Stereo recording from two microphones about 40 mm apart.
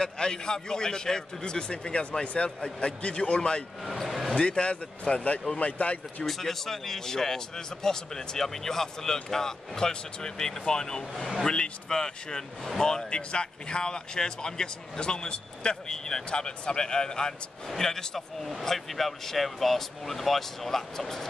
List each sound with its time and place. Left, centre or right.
0.0 s speech: centre
3.8 s speech: centre
4.4 s speech: left
6.2 s speech: centre